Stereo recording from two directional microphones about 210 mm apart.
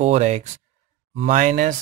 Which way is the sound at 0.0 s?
30° right (ahead or behind).